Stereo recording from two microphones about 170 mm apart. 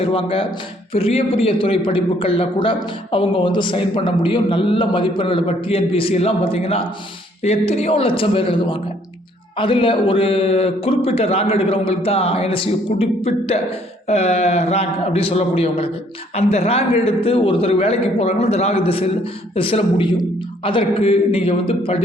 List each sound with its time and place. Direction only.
0.0 s a man's voice: 35° left (ahead or behind)